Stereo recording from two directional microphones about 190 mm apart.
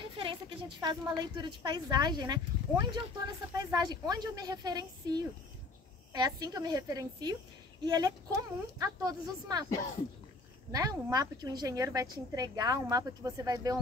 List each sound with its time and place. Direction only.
0.2 s a woman's voice: 25° right (ahead or behind)
10.7 s a woman's voice: 20° right (ahead or behind)